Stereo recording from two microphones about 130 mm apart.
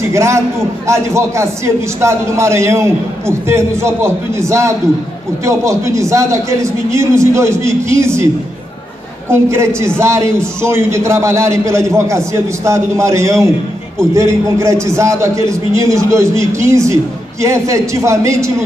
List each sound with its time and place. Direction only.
0.1 s a man's voice: 20° right (ahead or behind)
9.3 s a man's voice: 20° right (ahead or behind)